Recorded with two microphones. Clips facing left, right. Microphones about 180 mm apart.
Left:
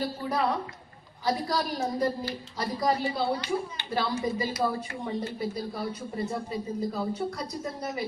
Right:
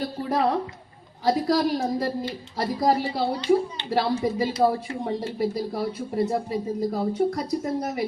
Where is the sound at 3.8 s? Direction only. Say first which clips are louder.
Right 4 dB; 65° right (ahead or behind).